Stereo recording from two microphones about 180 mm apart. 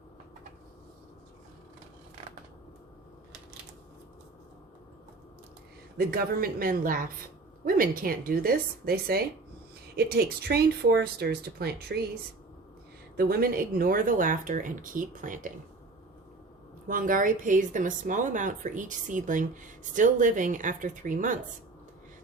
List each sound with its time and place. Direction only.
6.0 s speech: 55° right (ahead or behind)
13.1 s speech: 60° right (ahead or behind)
16.9 s speech: 50° right (ahead or behind)